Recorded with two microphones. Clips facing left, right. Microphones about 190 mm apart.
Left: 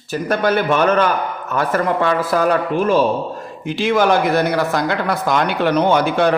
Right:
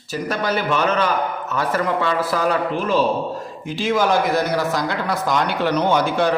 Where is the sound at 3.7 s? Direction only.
65° left (ahead or behind).